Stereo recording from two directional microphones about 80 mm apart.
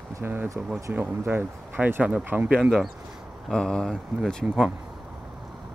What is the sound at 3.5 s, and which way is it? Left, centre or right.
Speech, centre.